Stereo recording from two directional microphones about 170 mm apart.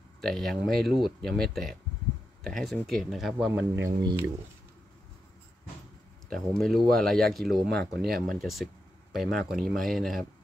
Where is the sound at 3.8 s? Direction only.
15° right (ahead or behind).